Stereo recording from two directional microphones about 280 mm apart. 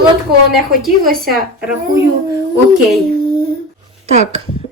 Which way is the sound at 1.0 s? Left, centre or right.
Right.